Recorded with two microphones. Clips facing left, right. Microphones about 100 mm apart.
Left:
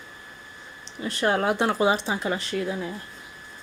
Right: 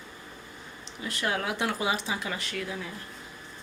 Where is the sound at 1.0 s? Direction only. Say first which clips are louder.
Left 7 dB; 35° left (ahead or behind).